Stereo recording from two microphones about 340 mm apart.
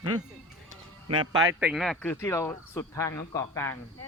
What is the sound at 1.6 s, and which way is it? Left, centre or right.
Speech, centre.